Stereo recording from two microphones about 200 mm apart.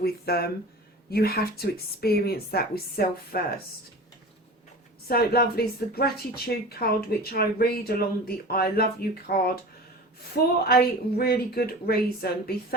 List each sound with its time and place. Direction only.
0.0 s speech: 50° left (ahead or behind)
5.0 s speech: 50° left (ahead or behind)